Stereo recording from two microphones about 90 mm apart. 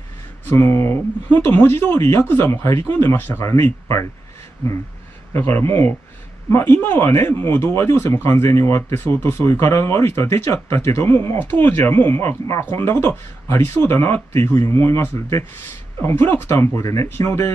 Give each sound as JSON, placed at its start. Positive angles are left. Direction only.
{"t": 0.5, "sound": "speech", "side_deg": 25}
{"t": 5.3, "sound": "speech", "side_deg": 25}